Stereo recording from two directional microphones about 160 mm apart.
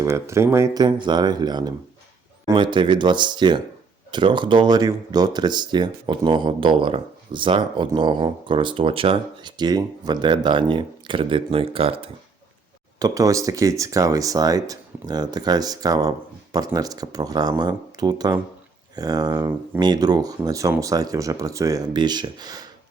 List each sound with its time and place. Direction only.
0.0 s speech: 15° right (ahead or behind); by 12.1 s 35° right (ahead or behind)
13.0 s speech: 20° right (ahead or behind)